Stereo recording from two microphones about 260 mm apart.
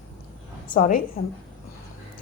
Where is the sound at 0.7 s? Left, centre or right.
Left.